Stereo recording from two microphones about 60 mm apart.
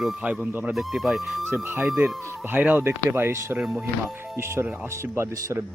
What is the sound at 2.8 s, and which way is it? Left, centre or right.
Speech, right.